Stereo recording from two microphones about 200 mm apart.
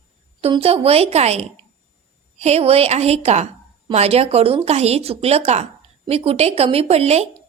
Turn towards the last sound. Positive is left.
turn(degrees=-30)  # may be behind; listen again after turning